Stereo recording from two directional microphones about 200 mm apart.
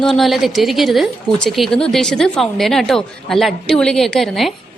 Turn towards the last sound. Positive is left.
turn(degrees=0)  # may be behind; listen again after turning